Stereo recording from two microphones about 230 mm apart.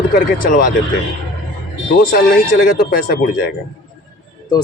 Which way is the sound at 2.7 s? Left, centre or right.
Left.